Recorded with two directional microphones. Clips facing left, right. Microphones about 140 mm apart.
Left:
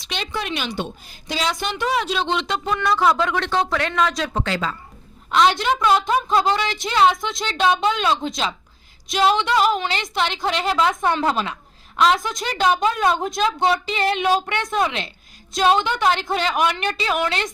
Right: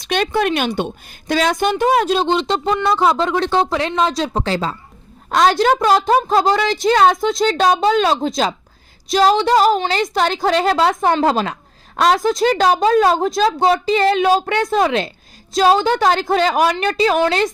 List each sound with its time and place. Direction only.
0.0 s a woman's voice: 50° right (ahead or behind); by 17.5 s 35° right (ahead or behind)